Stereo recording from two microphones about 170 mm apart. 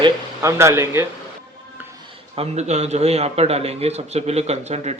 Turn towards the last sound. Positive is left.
turn(degrees=-40)  # may be behind; listen again after turning